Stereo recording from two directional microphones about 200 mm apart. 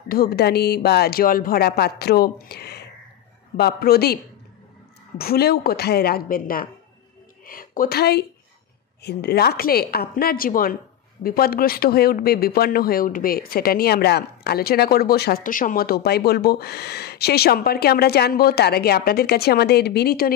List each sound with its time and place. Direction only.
0.1 s a woman's voice: 50° left (ahead or behind)